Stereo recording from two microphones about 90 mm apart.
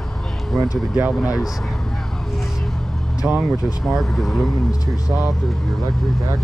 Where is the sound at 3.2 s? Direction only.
20° right (ahead or behind).